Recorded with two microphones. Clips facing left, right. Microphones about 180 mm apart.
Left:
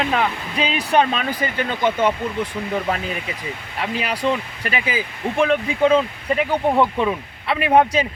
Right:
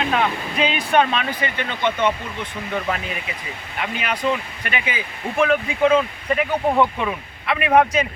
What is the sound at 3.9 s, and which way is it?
Speech, 35° left (ahead or behind).